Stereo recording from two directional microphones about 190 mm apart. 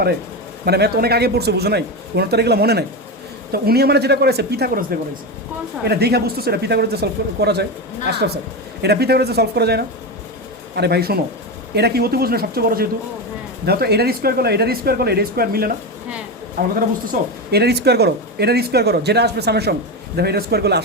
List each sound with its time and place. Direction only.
0.6 s speech: 55° right (ahead or behind)